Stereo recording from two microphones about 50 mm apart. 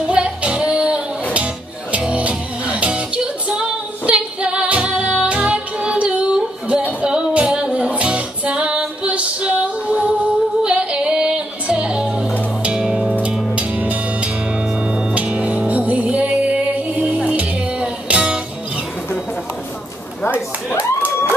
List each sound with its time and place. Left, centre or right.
0.1 s music: right
3.4 s female singing: centre
7.0 s music: centre
13.6 s music: right
15.1 s music: right